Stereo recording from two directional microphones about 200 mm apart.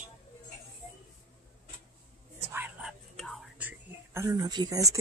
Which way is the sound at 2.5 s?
5° right (ahead or behind).